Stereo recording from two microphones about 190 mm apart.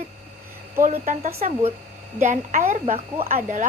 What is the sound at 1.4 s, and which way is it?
Speech, 40° right (ahead or behind).